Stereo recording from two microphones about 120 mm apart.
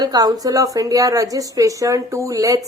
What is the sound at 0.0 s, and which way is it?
Speech, 35° right (ahead or behind).